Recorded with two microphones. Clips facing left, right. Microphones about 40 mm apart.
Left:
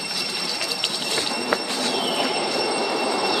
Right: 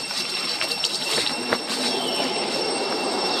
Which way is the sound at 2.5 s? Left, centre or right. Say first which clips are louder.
Left 2 dB; left.